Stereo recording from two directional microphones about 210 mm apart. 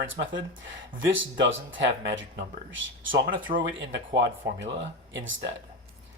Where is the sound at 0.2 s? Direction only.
60° right (ahead or behind).